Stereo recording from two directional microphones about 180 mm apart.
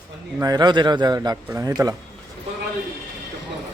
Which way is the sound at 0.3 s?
20° right (ahead or behind).